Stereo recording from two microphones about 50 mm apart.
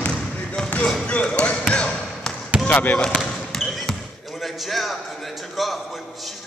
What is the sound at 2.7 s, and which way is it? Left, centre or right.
Speech, left.